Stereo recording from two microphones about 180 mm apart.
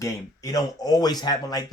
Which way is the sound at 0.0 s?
20° left (ahead or behind).